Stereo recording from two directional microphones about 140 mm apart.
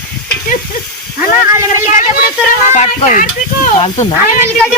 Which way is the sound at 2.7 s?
60° left (ahead or behind).